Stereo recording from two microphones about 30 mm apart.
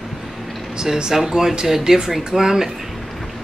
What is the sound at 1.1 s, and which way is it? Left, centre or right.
Speech, centre.